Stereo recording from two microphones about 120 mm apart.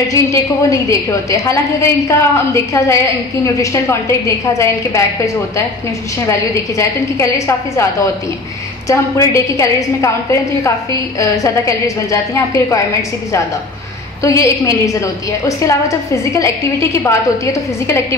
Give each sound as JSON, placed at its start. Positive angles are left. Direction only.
{"t": 0.1, "sound": "a woman's voice", "side_deg": 25}
{"t": 11.4, "sound": "a woman's voice", "side_deg": 30}
{"t": 14.2, "sound": "a woman's voice", "side_deg": 25}